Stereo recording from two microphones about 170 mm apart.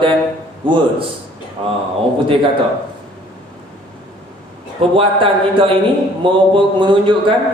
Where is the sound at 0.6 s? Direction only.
30° right (ahead or behind).